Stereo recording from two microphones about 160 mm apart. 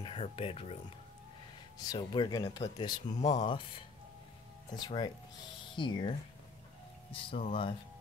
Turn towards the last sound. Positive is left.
turn(degrees=35)  # may be behind; listen again after turning